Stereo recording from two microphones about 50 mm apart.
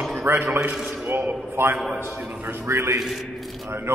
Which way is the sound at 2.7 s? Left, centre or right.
Right.